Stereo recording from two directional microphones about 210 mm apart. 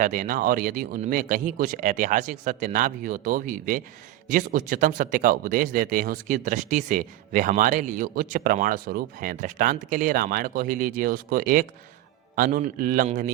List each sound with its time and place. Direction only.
0.0 s speech: 40° right (ahead or behind)